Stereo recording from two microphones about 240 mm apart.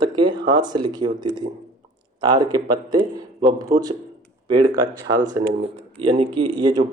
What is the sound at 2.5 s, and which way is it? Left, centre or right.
Speech, centre.